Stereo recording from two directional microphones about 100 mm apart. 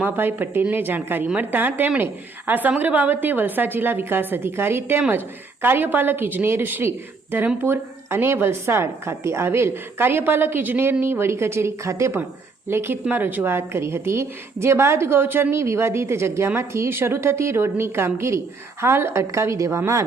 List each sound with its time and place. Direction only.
0.0 s a woman's voice: 20° right (ahead or behind)